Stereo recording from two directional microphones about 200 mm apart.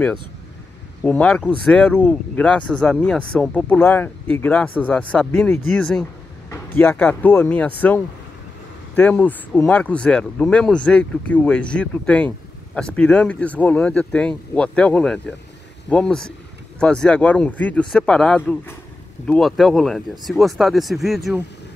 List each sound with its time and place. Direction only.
1.0 s speech: 5° left (ahead or behind)